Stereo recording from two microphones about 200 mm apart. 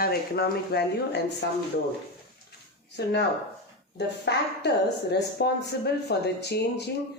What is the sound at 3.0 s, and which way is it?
Speech, 55° left (ahead or behind).